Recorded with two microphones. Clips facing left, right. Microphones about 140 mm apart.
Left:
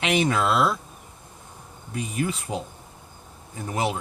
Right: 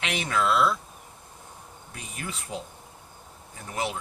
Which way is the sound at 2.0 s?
15° left (ahead or behind).